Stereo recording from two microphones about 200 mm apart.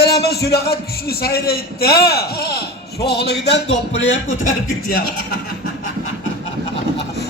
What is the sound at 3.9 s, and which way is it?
Speech, 70° left (ahead or behind).